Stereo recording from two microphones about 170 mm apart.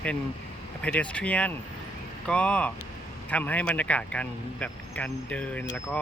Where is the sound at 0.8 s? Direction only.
10° left (ahead or behind).